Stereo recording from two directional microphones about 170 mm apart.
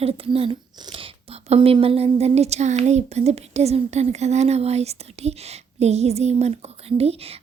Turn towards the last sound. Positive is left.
turn(degrees=-35)  # may be behind; listen again after turning